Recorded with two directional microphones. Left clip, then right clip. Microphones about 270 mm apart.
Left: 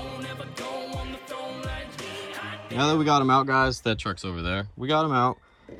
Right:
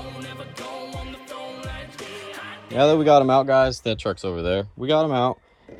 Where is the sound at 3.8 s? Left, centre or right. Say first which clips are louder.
Right 3 dB; centre.